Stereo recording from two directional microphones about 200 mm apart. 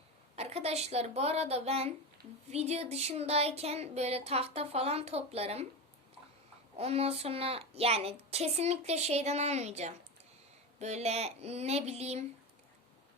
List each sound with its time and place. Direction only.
0.3 s a woman's voice: 30° right (ahead or behind)
6.7 s a woman's voice: 30° right (ahead or behind)